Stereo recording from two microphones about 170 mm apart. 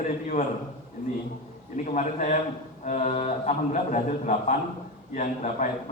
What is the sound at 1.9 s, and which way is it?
A man's voice, 45° left (ahead or behind).